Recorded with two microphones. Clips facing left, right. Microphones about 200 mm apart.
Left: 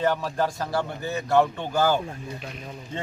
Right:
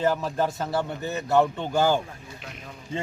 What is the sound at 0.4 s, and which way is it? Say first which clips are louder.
Speech: left 1 dB; 25° right (ahead or behind).